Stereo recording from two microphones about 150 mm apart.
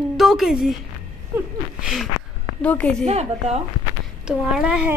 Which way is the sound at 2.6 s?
10° left (ahead or behind).